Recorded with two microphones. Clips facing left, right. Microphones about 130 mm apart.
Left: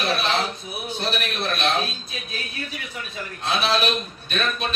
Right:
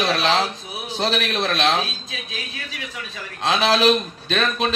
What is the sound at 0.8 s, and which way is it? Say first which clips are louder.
A man's voice: right 5 dB; 90° right.